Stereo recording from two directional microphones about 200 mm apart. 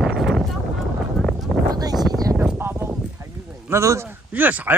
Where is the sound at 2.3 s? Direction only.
10° right (ahead or behind).